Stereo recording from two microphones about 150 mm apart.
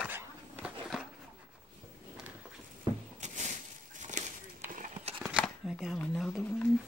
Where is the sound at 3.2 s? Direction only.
50° right (ahead or behind).